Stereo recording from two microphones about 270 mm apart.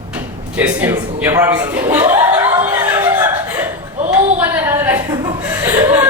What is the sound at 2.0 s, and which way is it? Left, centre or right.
Chuckle, centre.